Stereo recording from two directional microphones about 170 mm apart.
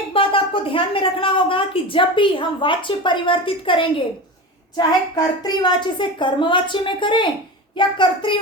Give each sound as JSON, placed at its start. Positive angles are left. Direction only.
{"t": 0.1, "sound": "a woman's voice", "side_deg": 30}